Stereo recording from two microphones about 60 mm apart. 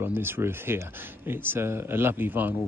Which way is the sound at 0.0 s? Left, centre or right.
Right.